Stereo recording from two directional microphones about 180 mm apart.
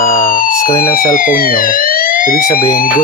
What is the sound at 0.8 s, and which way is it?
Speech, 55° left (ahead or behind).